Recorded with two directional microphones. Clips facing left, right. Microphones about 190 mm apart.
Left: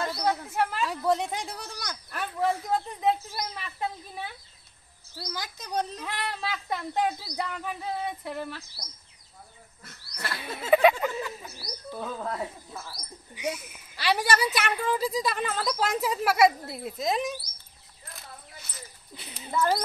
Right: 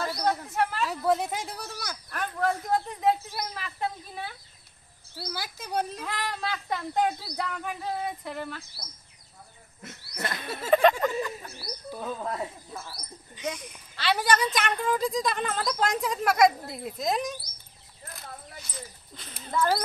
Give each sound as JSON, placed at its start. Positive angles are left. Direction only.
{"t": 0.2, "sound": "a woman's voice", "side_deg": 5}
{"t": 2.0, "sound": "a woman's voice", "side_deg": 10}
{"t": 5.2, "sound": "speech", "side_deg": -10}
{"t": 6.0, "sound": "a woman's voice", "side_deg": 5}
{"t": 9.8, "sound": "a sound", "side_deg": -20}
{"t": 10.7, "sound": "speech", "side_deg": 10}
{"t": 11.9, "sound": "speech", "side_deg": -5}
{"t": 13.3, "sound": "a woman's voice", "side_deg": 10}
{"t": 19.1, "sound": "a sound", "side_deg": 10}